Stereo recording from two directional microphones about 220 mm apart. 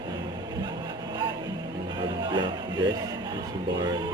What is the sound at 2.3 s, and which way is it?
Music, 20° right (ahead or behind).